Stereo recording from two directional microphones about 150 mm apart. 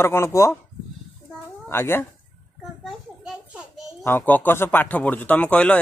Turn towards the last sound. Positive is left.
turn(degrees=10)  # may be behind; listen again after turning